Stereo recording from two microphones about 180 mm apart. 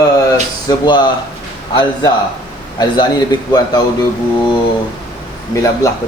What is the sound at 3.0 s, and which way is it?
Speech, 25° left (ahead or behind).